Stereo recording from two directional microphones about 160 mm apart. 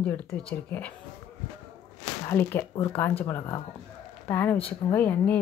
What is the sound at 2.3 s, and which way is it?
Speech, 15° left (ahead or behind).